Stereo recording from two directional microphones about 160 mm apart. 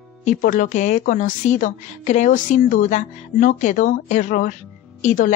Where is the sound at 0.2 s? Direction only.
55° left (ahead or behind).